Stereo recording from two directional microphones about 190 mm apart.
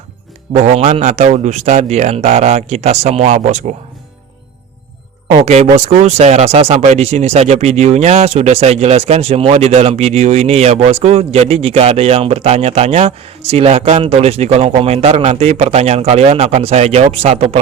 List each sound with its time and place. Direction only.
0.5 s speech: 35° right (ahead or behind)
5.3 s speech: 30° right (ahead or behind)